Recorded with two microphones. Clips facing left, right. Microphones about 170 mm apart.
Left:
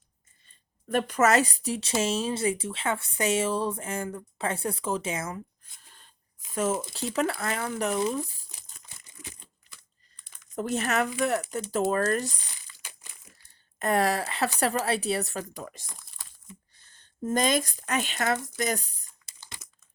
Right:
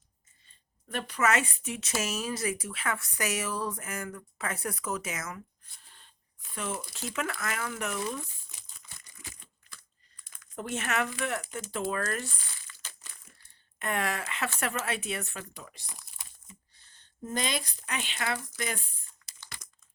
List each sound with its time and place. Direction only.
0.9 s speech: 45° left (ahead or behind); by 5.4 s 30° left (ahead or behind)
6.5 s speech: 40° left (ahead or behind)
9.3 s a sound: 25° left (ahead or behind)
10.5 s speech: 40° left (ahead or behind)
12.8 s crumpling: 15° left (ahead or behind)
13.7 s speech: 40° left (ahead or behind)
19.6 s crumpling: 5° left (ahead or behind)